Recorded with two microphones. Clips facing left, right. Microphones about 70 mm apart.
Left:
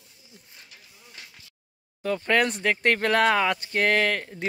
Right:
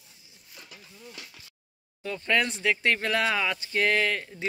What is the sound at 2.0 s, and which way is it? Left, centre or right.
Speech, left.